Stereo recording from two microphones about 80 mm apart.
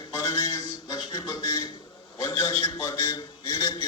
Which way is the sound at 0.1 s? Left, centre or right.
Left.